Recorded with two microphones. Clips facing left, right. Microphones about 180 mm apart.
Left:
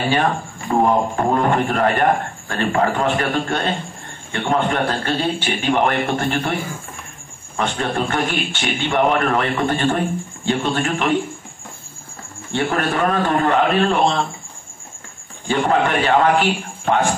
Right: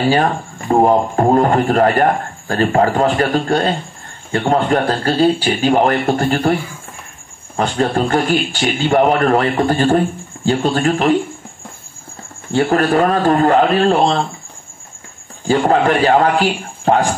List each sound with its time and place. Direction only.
0.1 s a man's voice: 35° right (ahead or behind)
7.5 s a man's voice: 35° right (ahead or behind)
12.5 s a man's voice: 35° right (ahead or behind)
15.4 s a man's voice: 35° right (ahead or behind)